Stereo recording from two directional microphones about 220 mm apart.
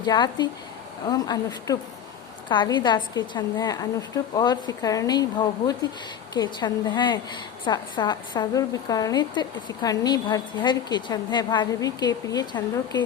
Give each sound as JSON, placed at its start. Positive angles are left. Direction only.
{"t": 0.0, "sound": "a woman's voice", "side_deg": 20}